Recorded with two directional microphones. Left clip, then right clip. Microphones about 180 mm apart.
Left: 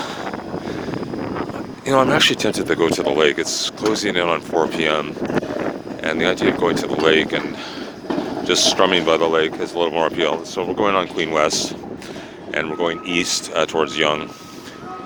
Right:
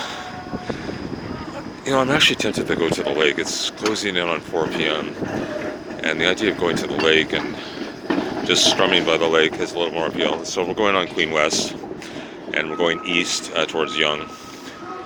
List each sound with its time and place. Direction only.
1.9 s speech: 25° left (ahead or behind)
6.0 s speech: 20° left (ahead or behind)
8.4 s speech: 25° left (ahead or behind)
9.7 s speech: 30° left (ahead or behind)
10.5 s speech: 10° left (ahead or behind)
12.7 s speech: 5° left (ahead or behind)
13.1 s speech: 25° left (ahead or behind)